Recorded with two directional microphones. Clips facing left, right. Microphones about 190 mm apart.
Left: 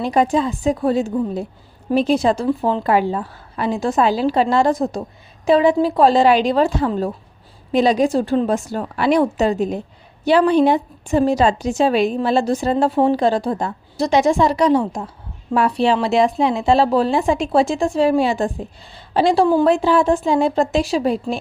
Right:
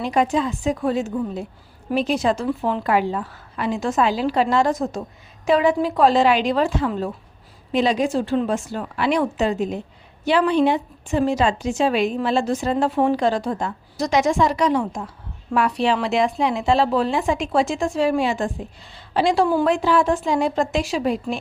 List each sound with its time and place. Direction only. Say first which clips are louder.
0.0 s a woman's voice: left 3 dB; 35° left (ahead or behind)